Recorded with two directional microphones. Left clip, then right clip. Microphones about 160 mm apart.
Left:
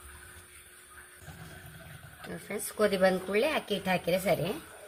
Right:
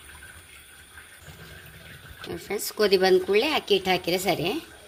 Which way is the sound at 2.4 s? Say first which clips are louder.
Right 6 dB; 55° right (ahead or behind).